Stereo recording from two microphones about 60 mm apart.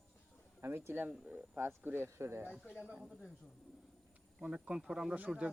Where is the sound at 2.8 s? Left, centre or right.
Centre.